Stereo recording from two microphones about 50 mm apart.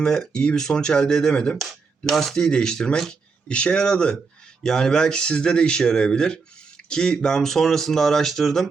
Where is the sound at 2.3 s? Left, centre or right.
Centre.